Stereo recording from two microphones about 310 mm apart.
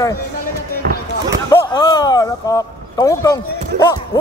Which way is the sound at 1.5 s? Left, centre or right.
Centre.